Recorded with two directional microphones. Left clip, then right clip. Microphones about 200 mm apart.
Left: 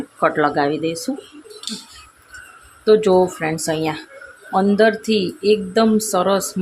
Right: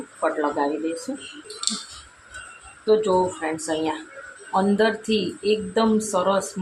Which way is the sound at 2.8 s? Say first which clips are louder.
Left 6 dB; 50° left (ahead or behind).